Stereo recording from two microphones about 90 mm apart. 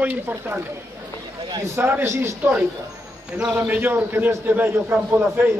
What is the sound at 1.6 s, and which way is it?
Speech, 25° right (ahead or behind).